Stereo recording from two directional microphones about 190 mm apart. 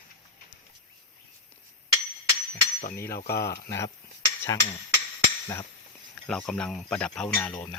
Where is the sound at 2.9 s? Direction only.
15° left (ahead or behind).